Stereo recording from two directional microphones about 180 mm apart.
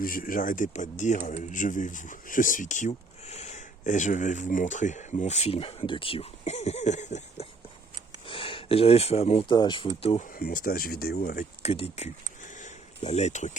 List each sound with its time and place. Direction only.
0.0 s speech: 50° left (ahead or behind)
8.3 s speech: 30° left (ahead or behind)
10.3 s speech: 50° left (ahead or behind)
11.6 s speech: 35° left (ahead or behind)
12.5 s a sound: 40° left (ahead or behind)